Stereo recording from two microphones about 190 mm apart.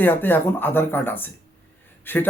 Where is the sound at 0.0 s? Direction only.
10° left (ahead or behind).